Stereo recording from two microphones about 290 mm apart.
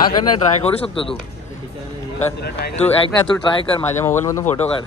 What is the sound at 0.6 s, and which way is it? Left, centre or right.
Speech, centre.